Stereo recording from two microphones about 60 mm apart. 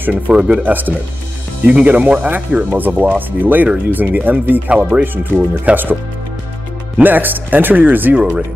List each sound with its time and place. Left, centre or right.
0.5 s speech: right
7.0 s speech: right